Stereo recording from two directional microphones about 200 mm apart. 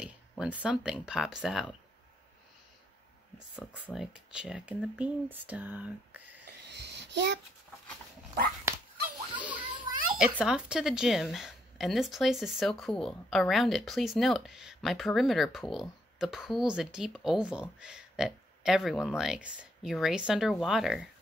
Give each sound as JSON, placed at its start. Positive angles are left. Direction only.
{"t": 0.0, "sound": "speech", "side_deg": -5}
{"t": 3.9, "sound": "speech", "side_deg": -5}
{"t": 6.7, "sound": "a sound", "side_deg": -60}
{"t": 9.4, "sound": "children playing", "side_deg": -5}
{"t": 10.4, "sound": "speech", "side_deg": -5}